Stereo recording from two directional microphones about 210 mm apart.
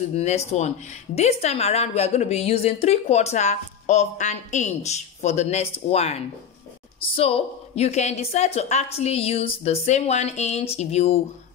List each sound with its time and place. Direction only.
0.1 s a woman's voice: 30° left (ahead or behind)